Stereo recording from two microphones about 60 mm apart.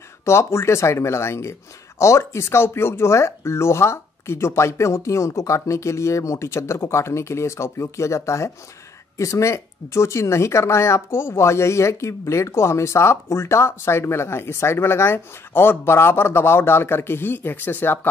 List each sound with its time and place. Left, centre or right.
0.2 s speech: left